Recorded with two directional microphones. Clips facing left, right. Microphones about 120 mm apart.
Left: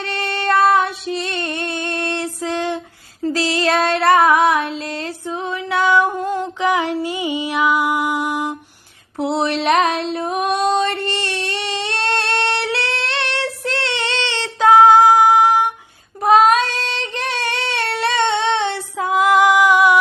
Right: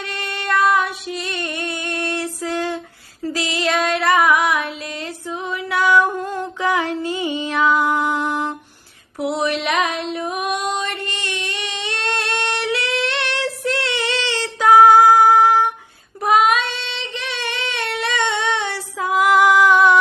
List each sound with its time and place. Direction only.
0.1 s female singing: 30° left (ahead or behind); by 8.5 s 10° left (ahead or behind)
9.2 s female singing: 30° left (ahead or behind)
16.3 s child singing: 35° left (ahead or behind); by 20.0 s 15° left (ahead or behind)